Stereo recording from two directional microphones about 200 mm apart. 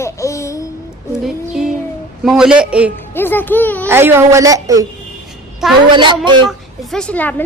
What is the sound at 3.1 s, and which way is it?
Speech, 10° left (ahead or behind).